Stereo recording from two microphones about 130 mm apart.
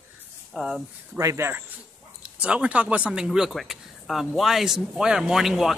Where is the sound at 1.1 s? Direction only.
25° right (ahead or behind).